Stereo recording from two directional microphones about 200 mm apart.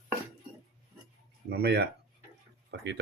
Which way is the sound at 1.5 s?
55° right (ahead or behind).